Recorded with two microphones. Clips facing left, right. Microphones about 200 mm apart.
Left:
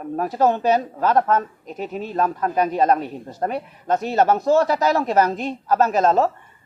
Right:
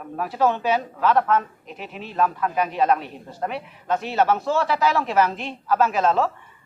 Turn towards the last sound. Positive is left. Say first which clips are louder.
# left 3 dB
turn(degrees=40)  # may be behind; listen again after turning